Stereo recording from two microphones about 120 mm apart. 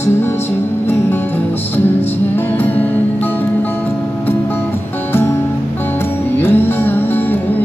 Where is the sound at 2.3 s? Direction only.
15° left (ahead or behind).